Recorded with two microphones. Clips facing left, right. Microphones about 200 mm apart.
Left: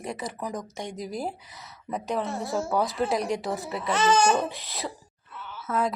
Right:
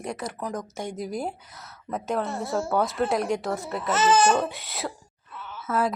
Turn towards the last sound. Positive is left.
turn(degrees=-5)  # may be behind; listen again after turning